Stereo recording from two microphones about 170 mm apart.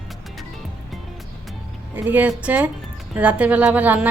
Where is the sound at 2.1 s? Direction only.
10° right (ahead or behind).